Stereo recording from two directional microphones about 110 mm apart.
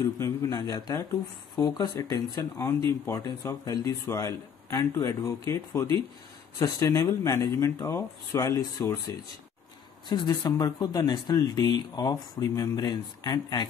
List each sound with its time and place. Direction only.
0.2 s speech: 25° left (ahead or behind)
0.6 s speech: 35° left (ahead or behind)
10.0 s speech: 45° left (ahead or behind)